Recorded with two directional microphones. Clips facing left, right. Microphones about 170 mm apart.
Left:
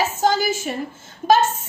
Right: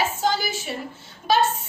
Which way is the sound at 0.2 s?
45° left (ahead or behind).